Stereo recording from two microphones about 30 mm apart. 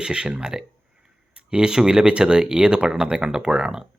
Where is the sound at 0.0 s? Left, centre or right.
Right.